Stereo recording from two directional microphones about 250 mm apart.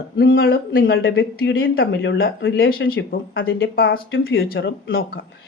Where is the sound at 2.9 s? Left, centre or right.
Left.